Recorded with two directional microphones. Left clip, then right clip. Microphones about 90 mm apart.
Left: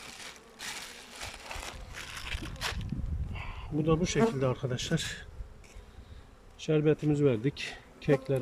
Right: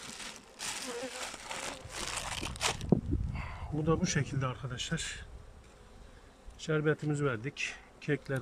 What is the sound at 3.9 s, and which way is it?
Speech, 35° left (ahead or behind).